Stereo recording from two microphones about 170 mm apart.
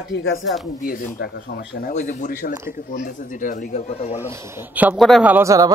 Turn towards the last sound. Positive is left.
turn(degrees=-20)  # may be behind; listen again after turning